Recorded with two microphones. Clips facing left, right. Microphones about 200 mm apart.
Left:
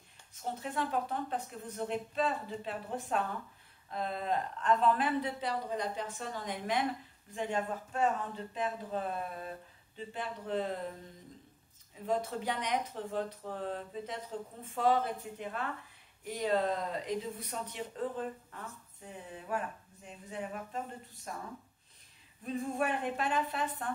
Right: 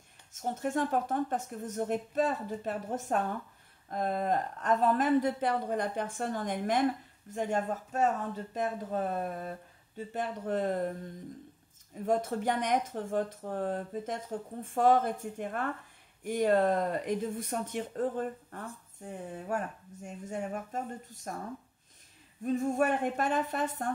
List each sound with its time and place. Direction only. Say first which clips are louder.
0.3 s speech: right 6 dB; 45° right (ahead or behind)
22.4 s speech: right 6 dB; 45° right (ahead or behind)